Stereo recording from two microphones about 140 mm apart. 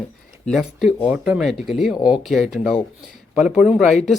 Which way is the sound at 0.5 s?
Centre (ahead or behind).